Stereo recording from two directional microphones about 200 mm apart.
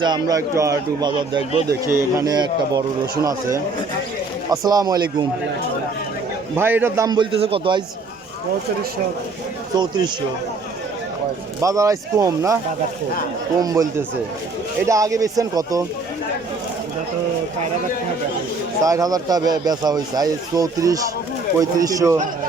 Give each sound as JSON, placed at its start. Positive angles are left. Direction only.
{"t": 0.0, "sound": "speech", "side_deg": -20}
{"t": 4.5, "sound": "speech", "side_deg": -20}
{"t": 6.6, "sound": "speech", "side_deg": -10}
{"t": 9.7, "sound": "speech", "side_deg": -20}
{"t": 11.6, "sound": "speech", "side_deg": -15}
{"t": 13.6, "sound": "speech", "side_deg": -20}
{"t": 18.8, "sound": "speech", "side_deg": -15}